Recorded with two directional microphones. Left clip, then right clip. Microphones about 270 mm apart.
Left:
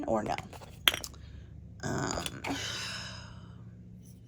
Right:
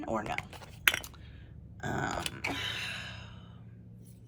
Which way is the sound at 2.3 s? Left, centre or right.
Centre.